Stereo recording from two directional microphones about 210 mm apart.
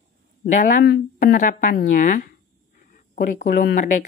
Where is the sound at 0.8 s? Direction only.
45° left (ahead or behind).